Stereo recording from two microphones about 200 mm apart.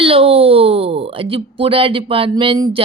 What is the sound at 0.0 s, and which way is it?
Speech, 30° right (ahead or behind).